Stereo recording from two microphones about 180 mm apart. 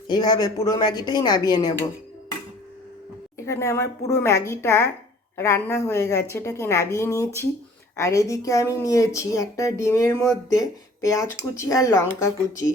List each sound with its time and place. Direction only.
0.1 s speech: 20° left (ahead or behind)
3.3 s speech: 15° left (ahead or behind)